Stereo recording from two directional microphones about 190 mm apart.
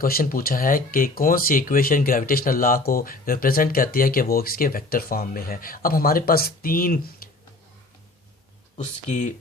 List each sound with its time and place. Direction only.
0.0 s speech: 50° left (ahead or behind)
8.8 s speech: 40° left (ahead or behind)